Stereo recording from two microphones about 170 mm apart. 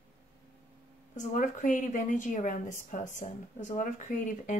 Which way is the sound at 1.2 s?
45° left (ahead or behind).